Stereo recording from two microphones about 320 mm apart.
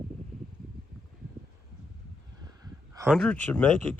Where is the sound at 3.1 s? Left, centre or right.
Centre.